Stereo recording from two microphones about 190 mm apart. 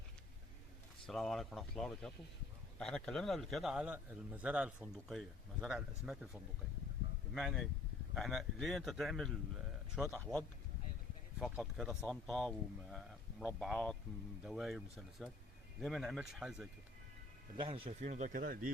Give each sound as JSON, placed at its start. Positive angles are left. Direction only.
{"t": 1.0, "sound": "a man's voice", "side_deg": 0}
{"t": 15.8, "sound": "a man's voice", "side_deg": 0}
{"t": 17.6, "sound": "a man's voice", "side_deg": -30}